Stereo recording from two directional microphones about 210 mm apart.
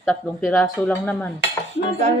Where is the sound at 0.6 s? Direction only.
5° left (ahead or behind).